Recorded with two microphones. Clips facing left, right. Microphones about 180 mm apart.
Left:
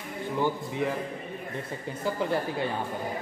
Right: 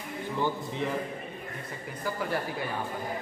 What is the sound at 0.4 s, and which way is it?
Speech, 15° left (ahead or behind).